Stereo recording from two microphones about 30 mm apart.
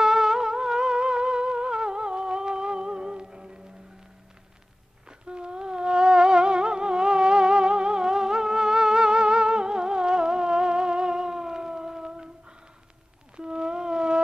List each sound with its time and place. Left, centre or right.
0.0 s music: centre; by 3.5 s right
5.2 s humming: right
13.4 s a sound: right